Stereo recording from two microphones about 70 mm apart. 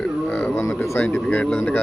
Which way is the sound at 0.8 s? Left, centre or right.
Left.